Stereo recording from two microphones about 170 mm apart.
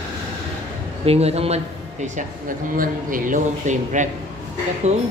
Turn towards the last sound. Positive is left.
turn(degrees=-40)  # may be behind; listen again after turning